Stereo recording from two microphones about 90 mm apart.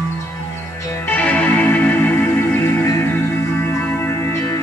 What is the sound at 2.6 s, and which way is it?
Music, 30° left (ahead or behind).